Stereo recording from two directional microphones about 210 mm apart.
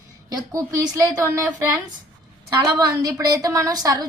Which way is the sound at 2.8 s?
15° right (ahead or behind).